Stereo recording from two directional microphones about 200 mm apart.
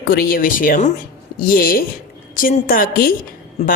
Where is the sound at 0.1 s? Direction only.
45° left (ahead or behind).